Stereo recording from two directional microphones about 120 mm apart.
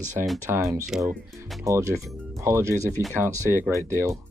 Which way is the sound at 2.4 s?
20° right (ahead or behind).